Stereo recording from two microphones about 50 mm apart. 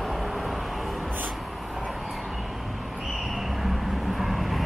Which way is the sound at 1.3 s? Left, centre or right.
Centre.